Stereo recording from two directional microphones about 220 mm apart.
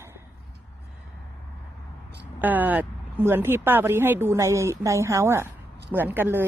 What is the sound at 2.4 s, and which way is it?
Speech, 10° right (ahead or behind).